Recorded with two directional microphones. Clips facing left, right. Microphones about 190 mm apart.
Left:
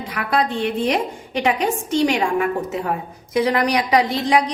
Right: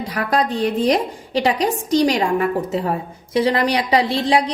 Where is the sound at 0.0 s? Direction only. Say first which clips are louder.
Right 1 dB; 35° right (ahead or behind).